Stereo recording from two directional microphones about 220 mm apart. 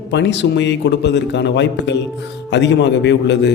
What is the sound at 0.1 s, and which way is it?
A man's voice, 55° left (ahead or behind).